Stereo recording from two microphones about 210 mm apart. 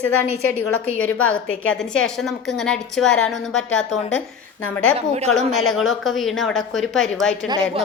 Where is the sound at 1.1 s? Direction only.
75° left (ahead or behind).